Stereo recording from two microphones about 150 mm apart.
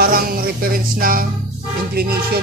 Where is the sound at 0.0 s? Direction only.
80° right.